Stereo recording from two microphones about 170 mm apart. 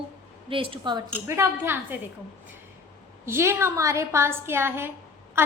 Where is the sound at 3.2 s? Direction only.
15° right (ahead or behind).